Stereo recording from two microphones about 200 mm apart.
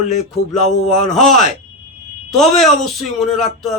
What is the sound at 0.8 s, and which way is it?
Speech, 35° left (ahead or behind).